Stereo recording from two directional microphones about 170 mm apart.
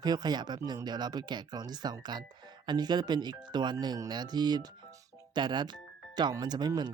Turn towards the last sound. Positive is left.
turn(degrees=-25)  # may be behind; listen again after turning